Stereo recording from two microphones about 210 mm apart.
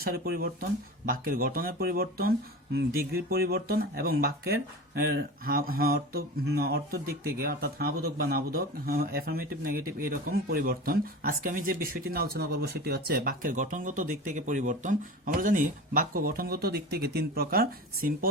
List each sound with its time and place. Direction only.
0.0 s speech: 45° right (ahead or behind)